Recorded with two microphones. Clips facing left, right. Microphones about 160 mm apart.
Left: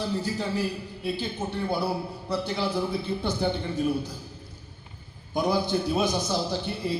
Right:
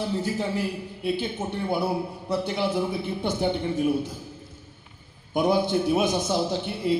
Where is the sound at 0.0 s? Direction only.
25° right (ahead or behind).